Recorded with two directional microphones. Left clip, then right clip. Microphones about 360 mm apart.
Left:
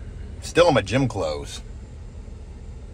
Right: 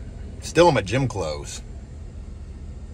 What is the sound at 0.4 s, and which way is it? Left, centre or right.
Speech, centre.